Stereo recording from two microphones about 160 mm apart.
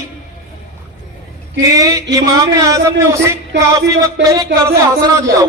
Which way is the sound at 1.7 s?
20° right (ahead or behind).